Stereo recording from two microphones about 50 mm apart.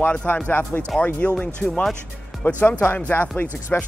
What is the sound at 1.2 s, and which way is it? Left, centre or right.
Speech, left.